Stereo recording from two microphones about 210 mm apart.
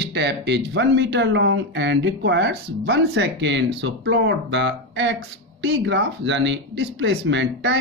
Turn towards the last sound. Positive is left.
turn(degrees=-60)  # may be behind; listen again after turning